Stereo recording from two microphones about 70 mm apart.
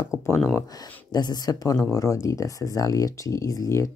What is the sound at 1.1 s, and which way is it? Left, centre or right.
Speech, left.